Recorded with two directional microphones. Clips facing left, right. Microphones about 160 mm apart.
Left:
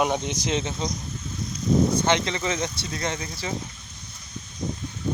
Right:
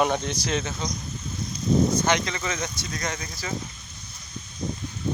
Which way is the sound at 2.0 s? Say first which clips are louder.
Left 2 dB; 25° left (ahead or behind).